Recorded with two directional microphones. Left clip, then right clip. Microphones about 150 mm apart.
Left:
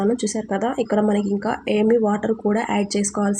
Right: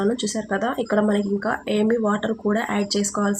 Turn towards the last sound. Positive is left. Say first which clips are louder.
# even
turn(degrees=20)  # may be behind; listen again after turning